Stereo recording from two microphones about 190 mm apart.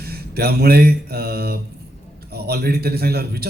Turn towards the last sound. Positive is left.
turn(degrees=-55)  # may be behind; listen again after turning